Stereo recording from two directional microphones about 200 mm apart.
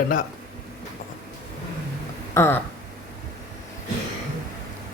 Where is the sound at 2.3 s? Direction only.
10° left (ahead or behind).